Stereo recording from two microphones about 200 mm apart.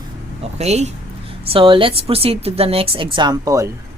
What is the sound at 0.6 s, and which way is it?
Speech, 35° right (ahead or behind).